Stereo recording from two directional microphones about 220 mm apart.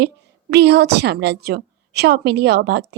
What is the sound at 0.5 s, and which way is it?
A woman's voice, 50° right (ahead or behind).